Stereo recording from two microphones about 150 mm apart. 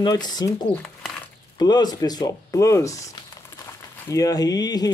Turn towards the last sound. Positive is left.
turn(degrees=25)  # may be behind; listen again after turning